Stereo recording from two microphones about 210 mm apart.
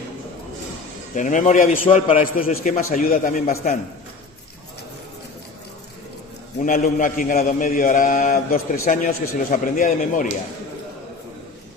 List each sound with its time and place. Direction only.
1.1 s a man's voice: 35° left (ahead or behind)
6.6 s a man's voice: 40° left (ahead or behind)